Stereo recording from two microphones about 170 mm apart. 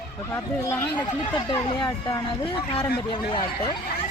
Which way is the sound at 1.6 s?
30° left (ahead or behind).